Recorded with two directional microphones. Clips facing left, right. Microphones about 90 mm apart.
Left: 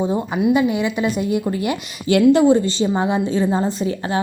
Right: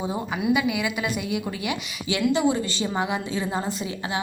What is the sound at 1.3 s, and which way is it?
Speech, 45° left (ahead or behind).